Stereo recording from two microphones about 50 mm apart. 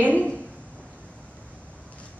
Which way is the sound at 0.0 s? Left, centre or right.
Left.